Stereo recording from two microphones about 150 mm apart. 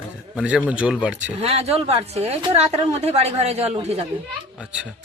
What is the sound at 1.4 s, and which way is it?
A woman's voice, 40° right (ahead or behind).